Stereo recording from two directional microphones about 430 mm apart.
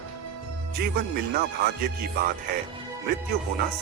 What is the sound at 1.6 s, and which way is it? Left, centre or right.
Speech, right.